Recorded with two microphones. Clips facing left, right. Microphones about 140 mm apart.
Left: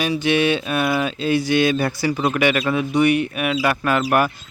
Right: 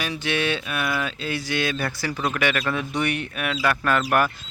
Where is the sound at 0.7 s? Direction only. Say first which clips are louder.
Left 6 dB; 30° left (ahead or behind).